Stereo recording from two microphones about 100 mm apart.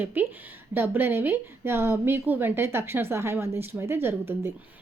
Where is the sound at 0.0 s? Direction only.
20° right (ahead or behind).